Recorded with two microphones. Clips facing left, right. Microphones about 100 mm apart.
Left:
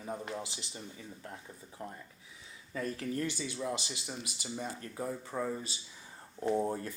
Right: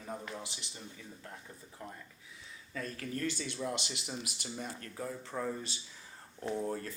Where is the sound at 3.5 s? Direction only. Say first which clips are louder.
Left 1 dB; centre (ahead or behind).